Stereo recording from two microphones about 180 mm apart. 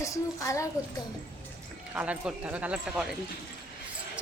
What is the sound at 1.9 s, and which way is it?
A woman's voice, 5° right (ahead or behind).